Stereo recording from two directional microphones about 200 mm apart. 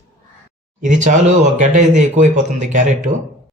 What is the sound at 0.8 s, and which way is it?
Speech, 40° right (ahead or behind).